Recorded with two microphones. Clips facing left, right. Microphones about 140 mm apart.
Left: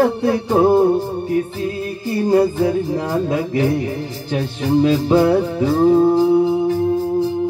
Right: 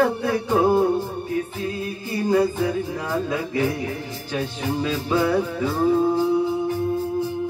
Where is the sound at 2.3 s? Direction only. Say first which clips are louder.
Left 5 dB; 30° left (ahead or behind).